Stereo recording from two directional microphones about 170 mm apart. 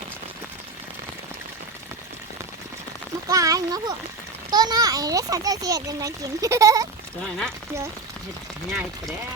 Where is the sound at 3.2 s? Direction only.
20° right (ahead or behind).